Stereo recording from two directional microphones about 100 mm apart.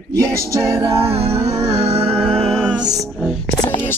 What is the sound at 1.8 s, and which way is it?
Music, 75° right (ahead or behind).